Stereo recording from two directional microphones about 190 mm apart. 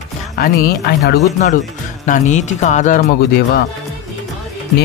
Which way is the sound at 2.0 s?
40° left (ahead or behind).